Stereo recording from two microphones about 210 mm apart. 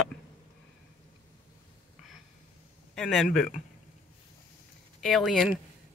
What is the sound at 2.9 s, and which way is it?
Speech, centre (ahead or behind).